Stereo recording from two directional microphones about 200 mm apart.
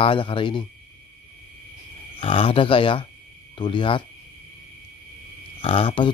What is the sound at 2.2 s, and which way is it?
Speech, 25° left (ahead or behind).